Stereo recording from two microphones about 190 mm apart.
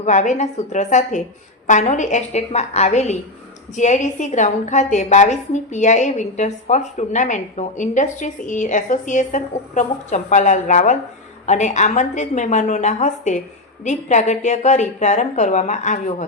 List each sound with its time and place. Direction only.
0.0 s a woman's voice: 40° left (ahead or behind)